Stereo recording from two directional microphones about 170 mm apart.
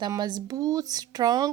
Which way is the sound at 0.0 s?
25° right (ahead or behind).